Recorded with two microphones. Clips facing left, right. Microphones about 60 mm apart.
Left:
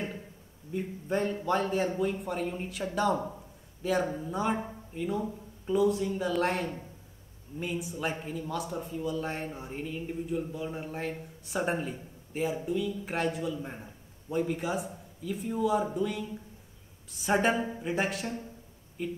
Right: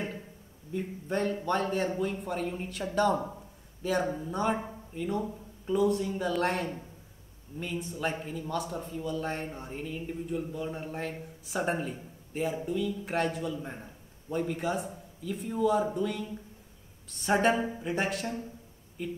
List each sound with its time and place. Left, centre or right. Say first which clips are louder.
0.7 s a man's voice: left 1 dB; centre